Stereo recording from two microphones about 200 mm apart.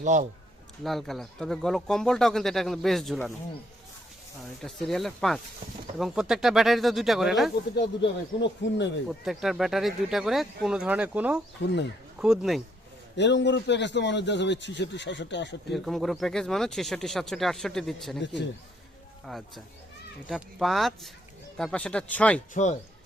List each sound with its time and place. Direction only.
0.0 s a man's voice: 35° right (ahead or behind)
0.9 s speech: centre (ahead or behind)
4.6 s speech: centre (ahead or behind)
7.8 s a man's voice: 60° left (ahead or behind)
9.0 s speech: centre (ahead or behind)
11.6 s a man's voice: 60° left (ahead or behind)
12.2 s speech: centre (ahead or behind)
13.1 s a man's voice: 60° left (ahead or behind)
15.7 s speech: centre (ahead or behind)
19.2 s speech: centre (ahead or behind)